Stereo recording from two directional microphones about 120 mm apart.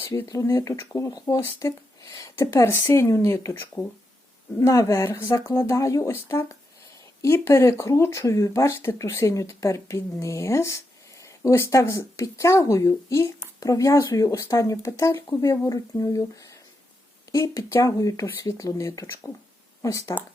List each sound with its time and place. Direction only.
0.0 s speech: 25° left (ahead or behind)
4.6 s speech: 25° left (ahead or behind)
7.2 s speech: 20° left (ahead or behind)